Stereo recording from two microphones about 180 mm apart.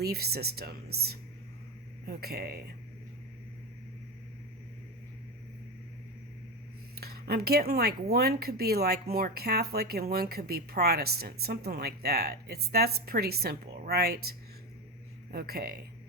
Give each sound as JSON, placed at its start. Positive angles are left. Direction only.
{"t": 0.0, "sound": "speech", "side_deg": -60}
{"t": 6.9, "sound": "speech", "side_deg": -60}